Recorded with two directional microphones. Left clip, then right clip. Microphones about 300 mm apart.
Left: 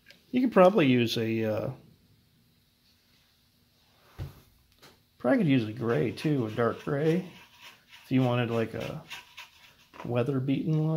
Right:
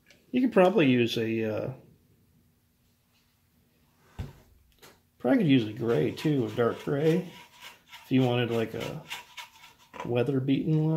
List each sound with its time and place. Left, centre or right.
0.3 s speech: left
5.2 s speech: left
10.1 s speech: left